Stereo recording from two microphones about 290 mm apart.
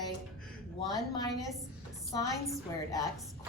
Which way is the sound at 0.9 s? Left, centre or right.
Centre.